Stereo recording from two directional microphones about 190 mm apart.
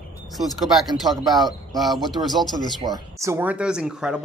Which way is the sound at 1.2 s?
20° right (ahead or behind).